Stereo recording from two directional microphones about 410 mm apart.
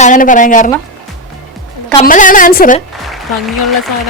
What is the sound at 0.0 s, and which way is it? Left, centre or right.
Speech, centre.